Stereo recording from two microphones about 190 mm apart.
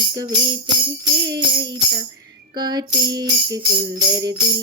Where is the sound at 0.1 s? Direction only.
20° right (ahead or behind).